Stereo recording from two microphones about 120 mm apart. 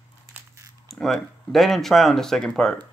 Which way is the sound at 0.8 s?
5° left (ahead or behind).